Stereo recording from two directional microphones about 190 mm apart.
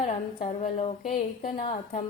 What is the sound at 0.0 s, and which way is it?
A woman's voice, 40° left (ahead or behind).